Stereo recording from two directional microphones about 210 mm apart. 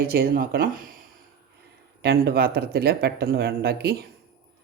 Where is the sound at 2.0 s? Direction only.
50° right (ahead or behind).